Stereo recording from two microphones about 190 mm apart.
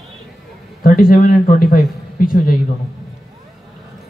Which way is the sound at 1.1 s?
50° left (ahead or behind).